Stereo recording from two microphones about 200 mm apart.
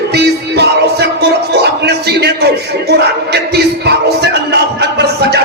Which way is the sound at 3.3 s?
55° right (ahead or behind).